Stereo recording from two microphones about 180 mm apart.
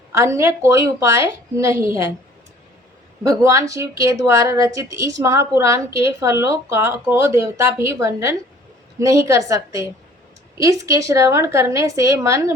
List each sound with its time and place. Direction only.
0.1 s a woman's voice: 15° right (ahead or behind)
3.2 s a woman's voice: 20° right (ahead or behind)